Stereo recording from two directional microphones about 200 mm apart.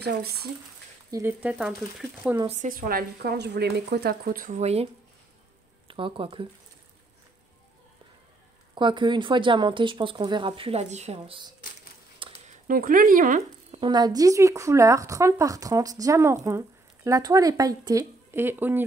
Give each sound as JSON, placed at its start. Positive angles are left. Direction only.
{"t": 0.0, "sound": "speech", "side_deg": -50}
{"t": 1.1, "sound": "speech", "side_deg": -10}
{"t": 2.4, "sound": "speech", "side_deg": -35}
{"t": 5.9, "sound": "speech", "side_deg": -25}
{"t": 8.7, "sound": "speech", "side_deg": -25}
{"t": 12.4, "sound": "speech", "side_deg": -45}
{"t": 13.7, "sound": "speech", "side_deg": -20}